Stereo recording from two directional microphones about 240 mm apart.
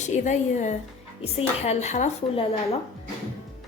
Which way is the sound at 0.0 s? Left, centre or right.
Left.